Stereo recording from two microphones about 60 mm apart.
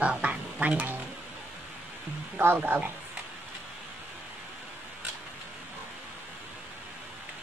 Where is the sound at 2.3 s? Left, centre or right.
Right.